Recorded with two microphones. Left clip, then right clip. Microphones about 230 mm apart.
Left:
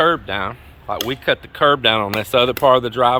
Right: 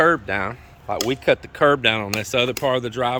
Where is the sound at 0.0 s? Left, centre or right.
Right.